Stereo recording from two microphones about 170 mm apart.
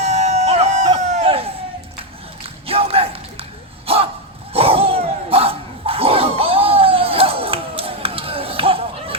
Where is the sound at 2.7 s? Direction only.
35° right (ahead or behind).